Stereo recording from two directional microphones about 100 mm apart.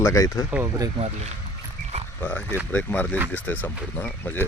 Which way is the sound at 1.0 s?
90° right.